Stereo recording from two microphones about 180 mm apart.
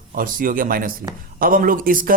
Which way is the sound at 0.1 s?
50° right (ahead or behind).